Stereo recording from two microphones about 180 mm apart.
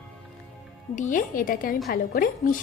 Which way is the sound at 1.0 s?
45° left (ahead or behind).